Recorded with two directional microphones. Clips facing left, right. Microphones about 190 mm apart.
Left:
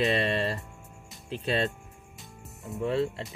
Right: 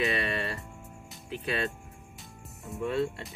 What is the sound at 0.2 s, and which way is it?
Music, 30° left (ahead or behind).